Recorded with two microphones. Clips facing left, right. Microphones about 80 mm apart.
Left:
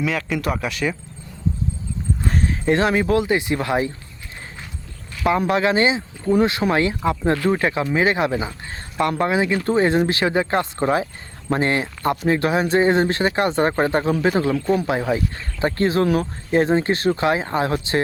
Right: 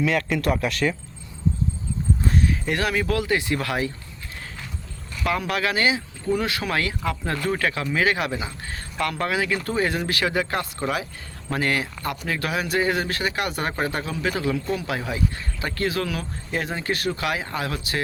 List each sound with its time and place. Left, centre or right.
0.0 s speech: centre
2.4 s speech: left
5.2 s speech: left